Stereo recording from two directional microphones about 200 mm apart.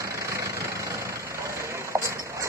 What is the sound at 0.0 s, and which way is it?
Vehicle, 15° right (ahead or behind).